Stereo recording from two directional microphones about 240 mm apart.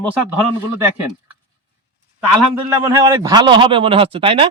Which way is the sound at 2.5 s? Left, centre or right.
Centre.